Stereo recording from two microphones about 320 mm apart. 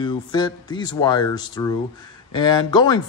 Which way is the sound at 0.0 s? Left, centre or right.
Centre.